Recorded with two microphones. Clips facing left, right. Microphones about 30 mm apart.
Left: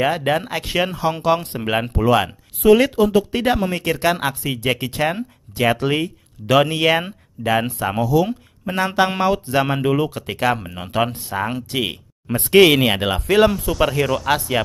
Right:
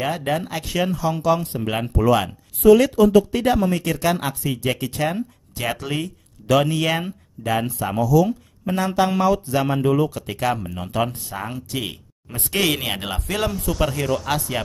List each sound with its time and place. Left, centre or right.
0.0 s speech: left
1.6 s speech: left
7.4 s speech: left
8.0 s speech: left
12.8 s speech: left